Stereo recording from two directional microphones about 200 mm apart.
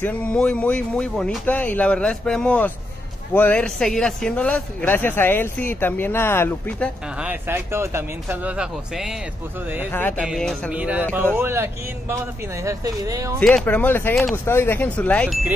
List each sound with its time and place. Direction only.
0.0 s speech: 5° left (ahead or behind)
7.2 s speech: 10° right (ahead or behind)
9.8 s speech: 10° left (ahead or behind)
10.1 s speech: 5° right (ahead or behind)
13.4 s speech: 5° left (ahead or behind)